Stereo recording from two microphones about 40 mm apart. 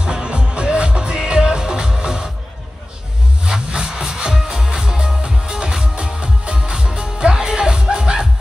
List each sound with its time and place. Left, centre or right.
0.0 s music: right
3.4 s music: centre